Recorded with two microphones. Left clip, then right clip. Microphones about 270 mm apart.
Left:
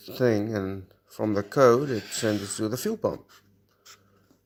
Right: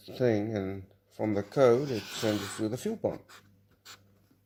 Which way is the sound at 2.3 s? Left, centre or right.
Left.